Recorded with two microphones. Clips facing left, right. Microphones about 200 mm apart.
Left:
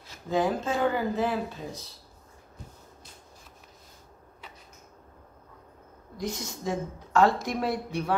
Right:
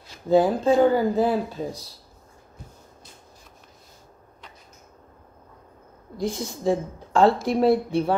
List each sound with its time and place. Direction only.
0.3 s speech: 35° right (ahead or behind)
6.1 s a woman's voice: 30° right (ahead or behind)